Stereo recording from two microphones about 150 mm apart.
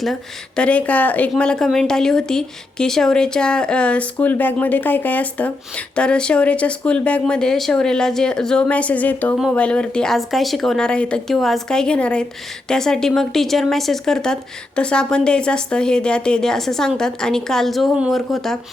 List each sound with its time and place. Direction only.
0.0 s a woman's voice: 5° left (ahead or behind)